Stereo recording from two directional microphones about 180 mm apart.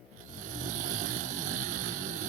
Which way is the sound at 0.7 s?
45° right (ahead or behind).